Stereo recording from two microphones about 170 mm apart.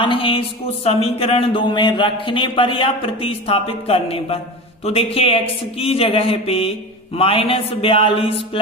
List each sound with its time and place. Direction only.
0.0 s a man's voice: 30° left (ahead or behind)